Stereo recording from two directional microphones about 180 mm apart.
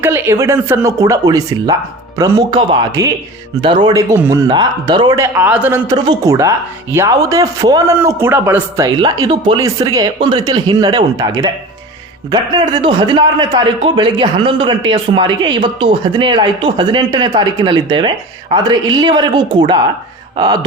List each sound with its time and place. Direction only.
0.0 s a man's voice: 15° right (ahead or behind)